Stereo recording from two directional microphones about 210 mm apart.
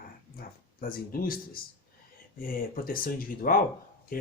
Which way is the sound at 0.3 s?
45° left (ahead or behind).